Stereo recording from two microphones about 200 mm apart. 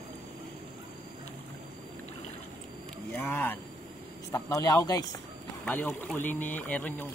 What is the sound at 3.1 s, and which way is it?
Speech, 10° left (ahead or behind).